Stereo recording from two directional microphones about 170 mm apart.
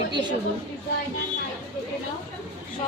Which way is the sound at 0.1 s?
25° right (ahead or behind).